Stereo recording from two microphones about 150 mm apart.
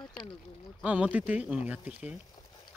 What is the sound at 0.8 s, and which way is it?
Speech, 10° right (ahead or behind).